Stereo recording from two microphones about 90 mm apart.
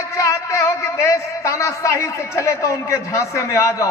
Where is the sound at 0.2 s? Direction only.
35° left (ahead or behind).